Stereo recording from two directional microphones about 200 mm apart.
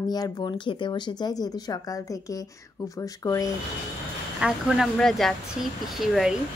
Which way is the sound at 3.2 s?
15° left (ahead or behind).